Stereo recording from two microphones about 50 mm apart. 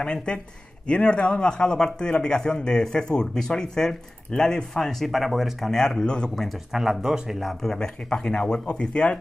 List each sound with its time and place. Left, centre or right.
0.0 s speech: centre
5.7 s speech: centre
6.3 s speech: centre
6.7 s speech: centre
7.6 s speech: centre